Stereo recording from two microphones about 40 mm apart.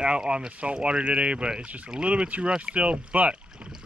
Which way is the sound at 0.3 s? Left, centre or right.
Right.